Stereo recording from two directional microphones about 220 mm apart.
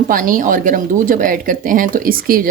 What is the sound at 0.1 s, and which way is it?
A woman's voice, 40° right (ahead or behind).